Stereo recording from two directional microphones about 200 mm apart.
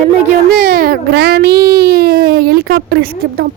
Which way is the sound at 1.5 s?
20° right (ahead or behind).